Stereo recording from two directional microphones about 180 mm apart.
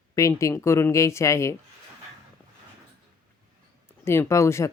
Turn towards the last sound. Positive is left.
turn(degrees=15)  # may be behind; listen again after turning